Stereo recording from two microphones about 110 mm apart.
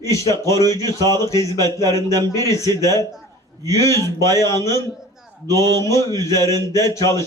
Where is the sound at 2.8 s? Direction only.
30° left (ahead or behind).